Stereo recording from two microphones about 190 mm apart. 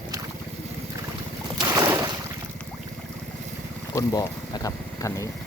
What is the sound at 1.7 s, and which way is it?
Boat, 15° right (ahead or behind).